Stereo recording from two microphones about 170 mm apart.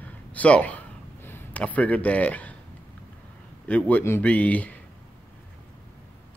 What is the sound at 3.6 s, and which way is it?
Speech, 10° left (ahead or behind).